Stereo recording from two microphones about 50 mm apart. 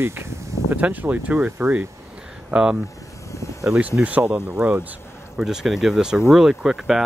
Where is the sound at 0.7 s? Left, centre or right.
Right.